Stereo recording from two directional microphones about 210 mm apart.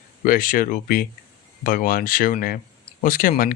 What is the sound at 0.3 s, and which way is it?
Speech, 40° left (ahead or behind).